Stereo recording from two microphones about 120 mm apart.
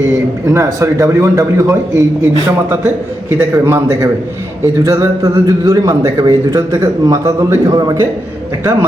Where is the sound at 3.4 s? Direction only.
20° right (ahead or behind).